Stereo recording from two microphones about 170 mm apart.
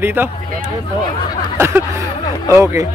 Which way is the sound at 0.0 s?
15° right (ahead or behind).